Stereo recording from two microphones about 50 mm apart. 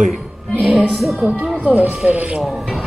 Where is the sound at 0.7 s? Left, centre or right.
Centre.